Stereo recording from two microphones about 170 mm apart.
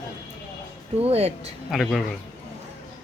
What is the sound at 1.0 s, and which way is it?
Speech, 35° right (ahead or behind).